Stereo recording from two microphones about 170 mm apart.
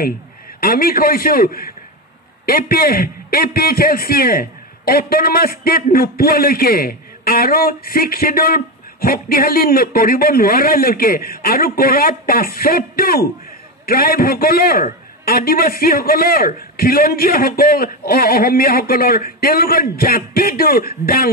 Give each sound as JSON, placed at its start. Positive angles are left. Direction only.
{"t": 0.6, "sound": "a man's voice", "side_deg": 60}